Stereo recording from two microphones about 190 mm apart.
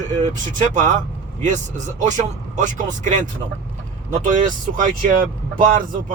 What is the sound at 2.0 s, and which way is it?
Speech, 40° right (ahead or behind).